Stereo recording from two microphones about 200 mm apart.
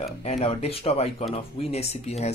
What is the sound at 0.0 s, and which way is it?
Speech, 30° left (ahead or behind).